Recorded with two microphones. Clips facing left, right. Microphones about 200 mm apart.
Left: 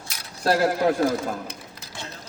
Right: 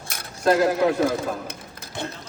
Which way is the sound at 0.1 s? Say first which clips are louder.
Right 4 dB; 55° right (ahead or behind).